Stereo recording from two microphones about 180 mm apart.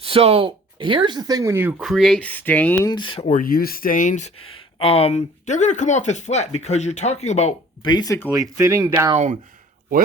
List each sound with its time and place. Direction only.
0.0 s speech: 35° right (ahead or behind); by 1.7 s 15° right (ahead or behind)
1.8 s speech: centre (ahead or behind)
2.9 s speech: 25° left (ahead or behind)
3.3 s speech: 55° left (ahead or behind)
4.8 s speech: 35° left (ahead or behind)
7.9 s speech: 20° left (ahead or behind)
8.3 s speech: 15° right (ahead or behind)